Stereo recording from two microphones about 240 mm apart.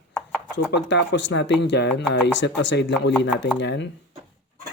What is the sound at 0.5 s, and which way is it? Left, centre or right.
A man's voice, left.